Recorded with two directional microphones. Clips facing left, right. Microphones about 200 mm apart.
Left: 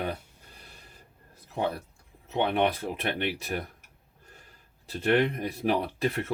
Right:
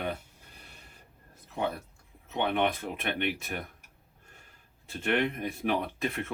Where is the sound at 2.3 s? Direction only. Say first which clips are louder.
Left 3 dB; 35° left (ahead or behind).